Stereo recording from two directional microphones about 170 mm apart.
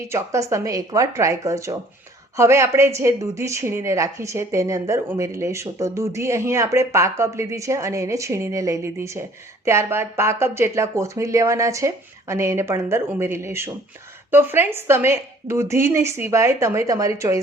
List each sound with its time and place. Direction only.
0.1 s speech: 20° right (ahead or behind)